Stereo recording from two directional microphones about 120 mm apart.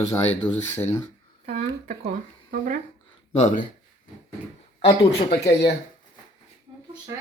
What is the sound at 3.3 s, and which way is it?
Speech, 75° left (ahead or behind).